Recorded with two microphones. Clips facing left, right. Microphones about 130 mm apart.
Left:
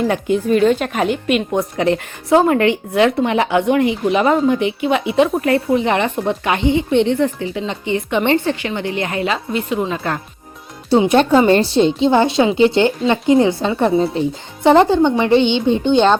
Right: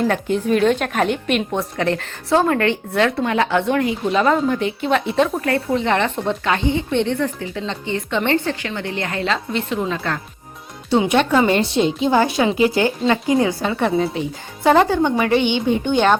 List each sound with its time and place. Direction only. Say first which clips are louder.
0.0 s a woman's voice: left 2 dB; 10° left (ahead or behind)
1.8 s a woman's voice: left 4 dB; 15° left (ahead or behind)
9.3 s a woman's voice: left 2 dB; 5° left (ahead or behind)
9.9 s a woman's voice: left 2 dB; 20° left (ahead or behind)
10.8 s a woman's voice: left 4 dB; 35° left (ahead or behind)